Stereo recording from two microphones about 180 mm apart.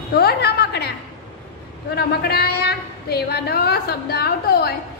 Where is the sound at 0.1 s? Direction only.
60° left (ahead or behind).